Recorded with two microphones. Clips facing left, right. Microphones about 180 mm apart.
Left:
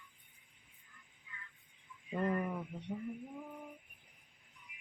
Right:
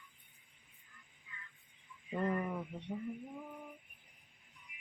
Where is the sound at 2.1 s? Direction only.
5° left (ahead or behind).